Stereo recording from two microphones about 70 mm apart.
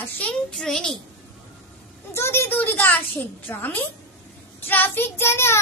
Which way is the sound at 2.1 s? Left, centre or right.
Left.